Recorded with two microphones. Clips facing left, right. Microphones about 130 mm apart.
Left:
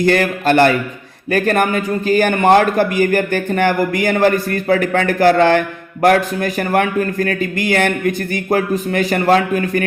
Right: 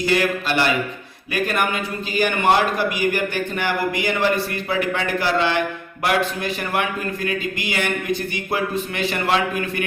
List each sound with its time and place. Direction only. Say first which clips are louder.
0.0 s a man's voice: left 6 dB; 50° left (ahead or behind)